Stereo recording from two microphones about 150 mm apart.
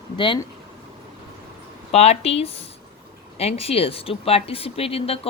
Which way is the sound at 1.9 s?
45° left (ahead or behind).